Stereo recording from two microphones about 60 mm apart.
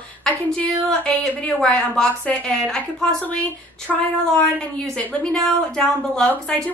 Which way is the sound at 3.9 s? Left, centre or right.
Centre.